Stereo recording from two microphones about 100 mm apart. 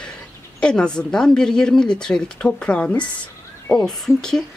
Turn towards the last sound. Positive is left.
turn(degrees=5)  # may be behind; listen again after turning